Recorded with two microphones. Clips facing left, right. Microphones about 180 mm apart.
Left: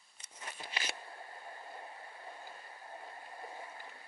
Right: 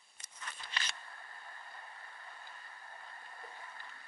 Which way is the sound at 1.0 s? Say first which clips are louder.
Left 5 dB; 20° left (ahead or behind).